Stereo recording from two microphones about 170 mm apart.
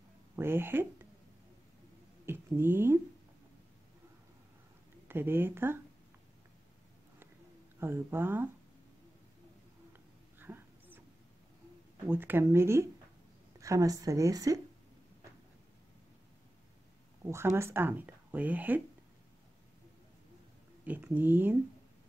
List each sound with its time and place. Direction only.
0.4 s speech: 15° right (ahead or behind)
2.2 s speech: 15° right (ahead or behind)
5.0 s a woman's voice: 10° right (ahead or behind)
7.8 s speech: 15° right (ahead or behind)
10.4 s a sound: 10° right (ahead or behind)
12.1 s speech: 10° right (ahead or behind)
17.2 s speech: 15° right (ahead or behind)
20.8 s speech: 10° right (ahead or behind)